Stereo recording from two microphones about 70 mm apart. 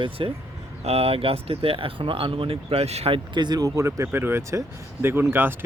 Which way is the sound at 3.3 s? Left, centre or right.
Right.